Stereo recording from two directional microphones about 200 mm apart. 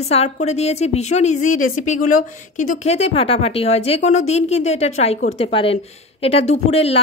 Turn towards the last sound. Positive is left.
turn(degrees=30)  # may be behind; listen again after turning